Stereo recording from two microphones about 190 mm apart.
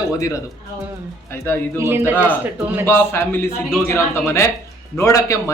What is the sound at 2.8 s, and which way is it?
A man's voice, 15° left (ahead or behind).